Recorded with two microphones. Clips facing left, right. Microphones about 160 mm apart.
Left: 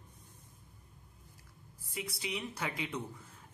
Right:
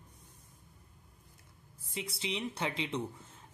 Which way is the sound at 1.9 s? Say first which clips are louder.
Right 2 dB; 25° right (ahead or behind).